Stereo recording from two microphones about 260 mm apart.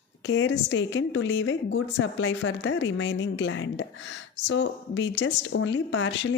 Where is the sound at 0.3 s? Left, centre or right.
Left.